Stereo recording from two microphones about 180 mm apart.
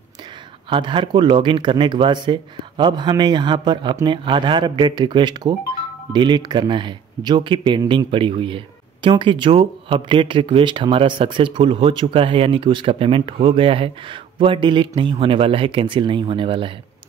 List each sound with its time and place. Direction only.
0.7 s speech: 30° right (ahead or behind)